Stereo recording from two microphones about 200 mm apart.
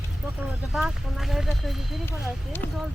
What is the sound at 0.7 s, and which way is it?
Speech, centre (ahead or behind).